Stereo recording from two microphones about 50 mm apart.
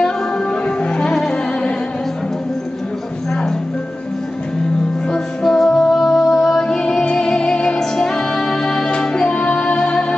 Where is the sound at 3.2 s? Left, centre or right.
Centre.